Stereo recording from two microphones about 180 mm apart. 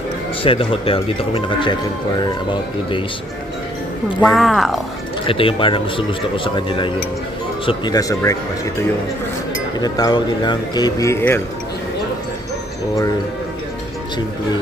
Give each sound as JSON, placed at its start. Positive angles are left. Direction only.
{"t": 0.4, "sound": "speech", "side_deg": 30}
{"t": 4.2, "sound": "speech", "side_deg": 0}
{"t": 5.2, "sound": "speech", "side_deg": 30}
{"t": 9.8, "sound": "speech", "side_deg": 20}